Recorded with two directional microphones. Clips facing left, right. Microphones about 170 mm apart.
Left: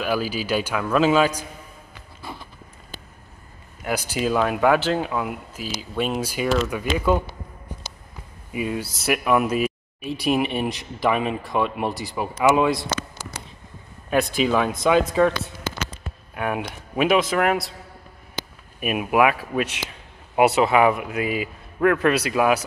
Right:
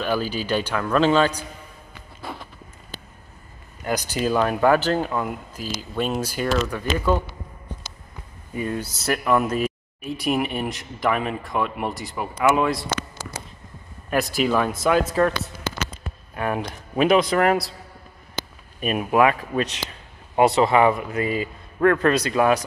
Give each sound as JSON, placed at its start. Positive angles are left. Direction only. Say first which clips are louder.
{"t": 0.0, "sound": "speech", "louder": "even", "side_deg": 5}
{"t": 3.8, "sound": "speech", "louder": "even", "side_deg": 5}
{"t": 8.5, "sound": "speech", "louder": "left 1 dB", "side_deg": 5}
{"t": 12.2, "sound": "speech", "louder": "left 2 dB", "side_deg": 20}
{"t": 12.5, "sound": "speech", "louder": "left 2 dB", "side_deg": 0}
{"t": 14.3, "sound": "speech", "louder": "even", "side_deg": -5}
{"t": 18.8, "sound": "speech", "louder": "even", "side_deg": 10}